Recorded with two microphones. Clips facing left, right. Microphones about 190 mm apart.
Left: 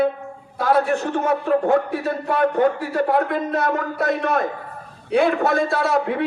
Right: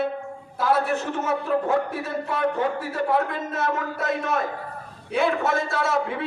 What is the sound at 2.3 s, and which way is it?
Speech, 55° left (ahead or behind).